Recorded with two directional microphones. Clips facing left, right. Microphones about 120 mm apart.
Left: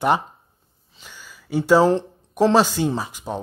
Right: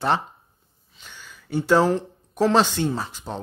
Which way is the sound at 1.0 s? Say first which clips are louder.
Left 1 dB; 5° left (ahead or behind).